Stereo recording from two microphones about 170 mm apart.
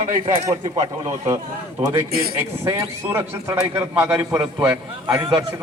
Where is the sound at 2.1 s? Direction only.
65° right (ahead or behind).